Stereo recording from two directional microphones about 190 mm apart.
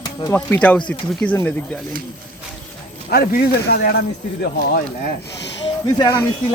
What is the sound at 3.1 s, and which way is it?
Speech, 55° left (ahead or behind).